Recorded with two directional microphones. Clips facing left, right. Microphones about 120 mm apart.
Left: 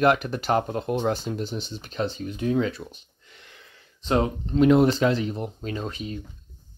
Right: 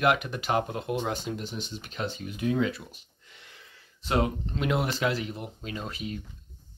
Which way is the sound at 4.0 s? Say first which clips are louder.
Left 3 dB; 25° left (ahead or behind).